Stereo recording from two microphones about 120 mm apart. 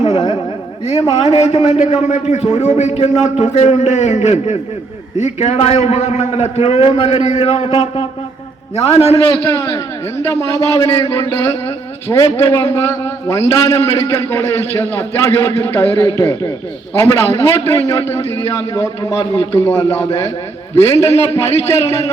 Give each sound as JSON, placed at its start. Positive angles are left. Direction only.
{"t": 0.0, "sound": "a sound", "side_deg": 60}
{"t": 1.2, "sound": "a man's voice", "side_deg": 60}
{"t": 9.5, "sound": "a man's voice", "side_deg": 25}